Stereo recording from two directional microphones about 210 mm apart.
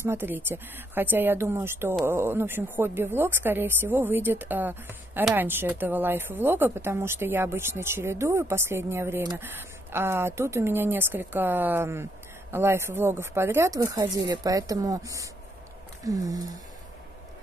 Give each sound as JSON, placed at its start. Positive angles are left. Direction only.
{"t": 0.0, "sound": "speech", "side_deg": -10}